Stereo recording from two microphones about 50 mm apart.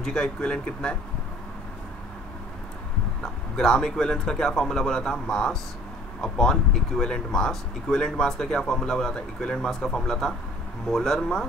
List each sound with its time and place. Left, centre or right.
0.0 s speech: centre
3.2 s speech: centre